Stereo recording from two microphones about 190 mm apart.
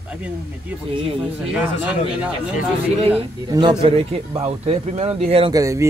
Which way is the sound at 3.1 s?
25° right (ahead or behind).